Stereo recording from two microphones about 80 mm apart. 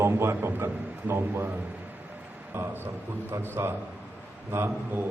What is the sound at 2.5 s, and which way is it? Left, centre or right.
A man's voice, right.